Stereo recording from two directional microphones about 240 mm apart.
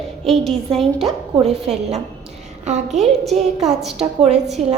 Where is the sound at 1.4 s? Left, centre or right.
Right.